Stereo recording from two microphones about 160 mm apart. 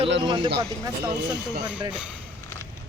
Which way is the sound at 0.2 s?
30° right (ahead or behind).